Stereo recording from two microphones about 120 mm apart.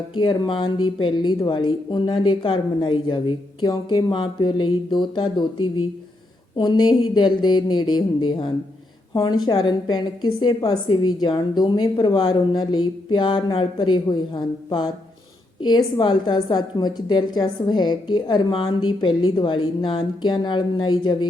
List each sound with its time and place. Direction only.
0.2 s a woman's voice: 40° left (ahead or behind)
6.6 s a woman's voice: 40° left (ahead or behind)
16.0 s a woman's voice: 40° left (ahead or behind)